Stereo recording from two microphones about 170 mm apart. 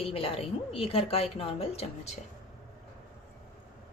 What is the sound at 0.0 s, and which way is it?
A woman's voice, 35° left (ahead or behind).